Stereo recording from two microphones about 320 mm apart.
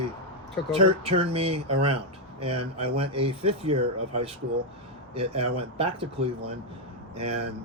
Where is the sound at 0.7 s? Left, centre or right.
Centre.